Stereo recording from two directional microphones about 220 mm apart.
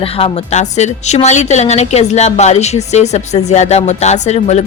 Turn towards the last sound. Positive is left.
turn(degrees=30)  # may be behind; listen again after turning